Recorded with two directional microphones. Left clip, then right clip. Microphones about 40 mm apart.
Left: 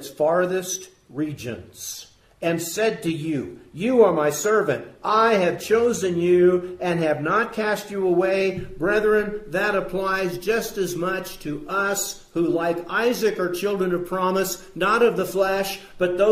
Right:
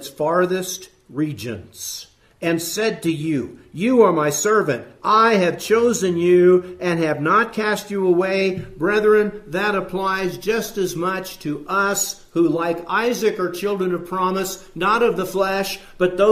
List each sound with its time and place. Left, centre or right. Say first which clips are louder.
0.2 s a man's voice: right 1 dB; right
7.9 s speech: right 6 dB; centre
8.2 s a man's voice: right 1 dB; right